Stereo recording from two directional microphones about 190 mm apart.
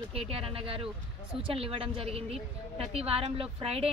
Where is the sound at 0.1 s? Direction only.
30° right (ahead or behind).